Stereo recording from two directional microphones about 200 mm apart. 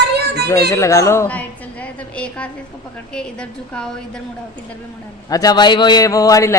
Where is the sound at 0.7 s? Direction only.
15° left (ahead or behind).